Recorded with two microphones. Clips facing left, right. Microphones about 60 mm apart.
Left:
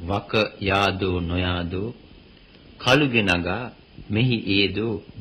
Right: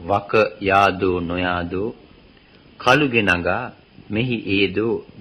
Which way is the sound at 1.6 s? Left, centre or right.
Right.